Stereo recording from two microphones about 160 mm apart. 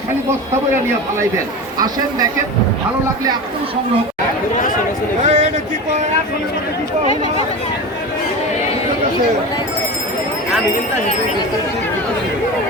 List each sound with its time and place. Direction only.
5.2 s speech: 50° right (ahead or behind)